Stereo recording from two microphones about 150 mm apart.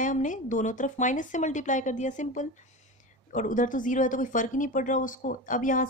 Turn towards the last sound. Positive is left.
turn(degrees=60)  # may be behind; listen again after turning